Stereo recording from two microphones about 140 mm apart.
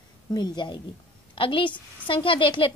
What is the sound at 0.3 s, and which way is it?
A woman's voice, 30° left (ahead or behind).